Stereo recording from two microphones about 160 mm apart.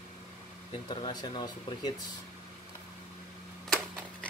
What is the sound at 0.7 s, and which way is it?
Speech, 25° left (ahead or behind).